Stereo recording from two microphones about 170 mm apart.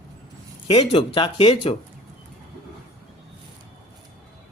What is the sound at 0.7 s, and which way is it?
Speech, 35° left (ahead or behind).